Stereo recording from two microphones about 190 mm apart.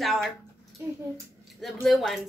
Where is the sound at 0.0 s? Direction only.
Centre (ahead or behind).